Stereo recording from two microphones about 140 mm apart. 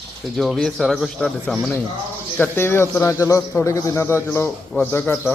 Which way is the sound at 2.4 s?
15° left (ahead or behind).